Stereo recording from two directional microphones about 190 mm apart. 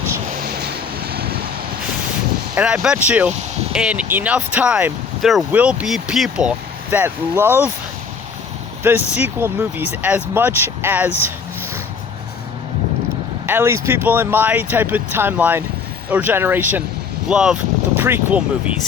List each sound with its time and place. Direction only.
1.1 s vehicle: 55° right (ahead or behind)
2.6 s speech: 5° right (ahead or behind)
8.8 s speech: 10° right (ahead or behind)
13.5 s speech: 15° right (ahead or behind)